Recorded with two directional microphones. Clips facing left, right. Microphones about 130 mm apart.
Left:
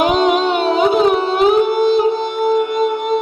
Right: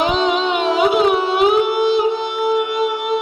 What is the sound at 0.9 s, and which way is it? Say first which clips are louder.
Music: left 1 dB; 40° left (ahead or behind).